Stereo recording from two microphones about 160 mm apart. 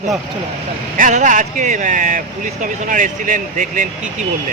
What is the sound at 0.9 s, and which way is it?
Speech, 50° right (ahead or behind).